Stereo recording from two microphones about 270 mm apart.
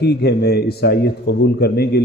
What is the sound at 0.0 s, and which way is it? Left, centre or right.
Speech, left.